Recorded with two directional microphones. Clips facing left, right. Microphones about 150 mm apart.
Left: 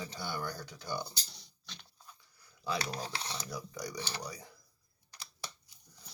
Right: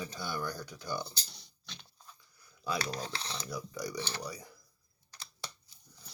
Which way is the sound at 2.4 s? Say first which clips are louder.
Right 1 dB; 25° left (ahead or behind).